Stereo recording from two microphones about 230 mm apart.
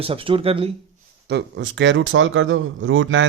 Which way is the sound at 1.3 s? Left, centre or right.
Right.